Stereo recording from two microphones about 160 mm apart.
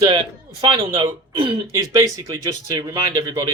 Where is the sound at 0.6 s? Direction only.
25° right (ahead or behind).